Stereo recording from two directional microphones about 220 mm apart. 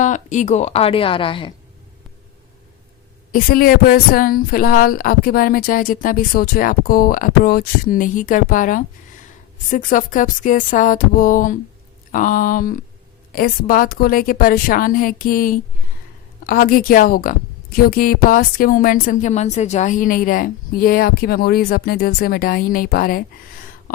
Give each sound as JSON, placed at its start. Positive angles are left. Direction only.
{"t": 0.0, "sound": "a woman's voice", "side_deg": 35}
{"t": 3.3, "sound": "a woman's voice", "side_deg": 40}